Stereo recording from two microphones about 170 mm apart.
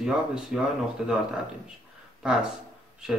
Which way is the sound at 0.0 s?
5° right (ahead or behind).